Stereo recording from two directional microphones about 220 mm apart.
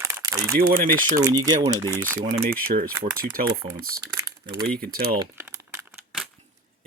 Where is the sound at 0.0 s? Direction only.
15° right (ahead or behind).